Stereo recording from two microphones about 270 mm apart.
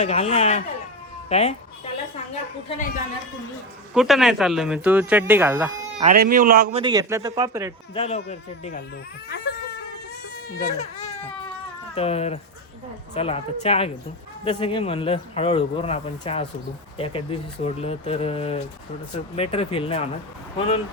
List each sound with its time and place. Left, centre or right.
0.0 s speech: left
3.9 s speech: centre
6.0 s a man's voice: right
6.8 s speech: centre
7.9 s speech: left
9.3 s a sound: left
10.2 s baby cry: left
10.8 s baby cry: left
11.9 s speech: left